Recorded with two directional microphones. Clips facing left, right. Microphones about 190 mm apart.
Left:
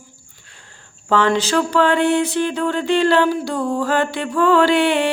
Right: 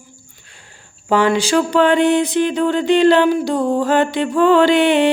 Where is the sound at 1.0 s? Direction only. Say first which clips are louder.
Right 2 dB; 10° right (ahead or behind).